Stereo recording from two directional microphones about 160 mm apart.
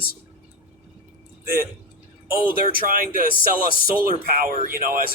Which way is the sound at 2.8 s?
60° right (ahead or behind).